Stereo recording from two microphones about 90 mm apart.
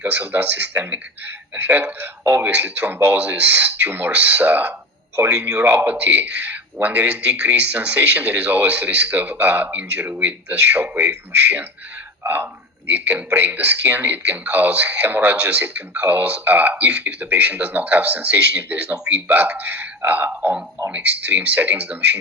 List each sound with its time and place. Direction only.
0.0 s speech: 15° right (ahead or behind)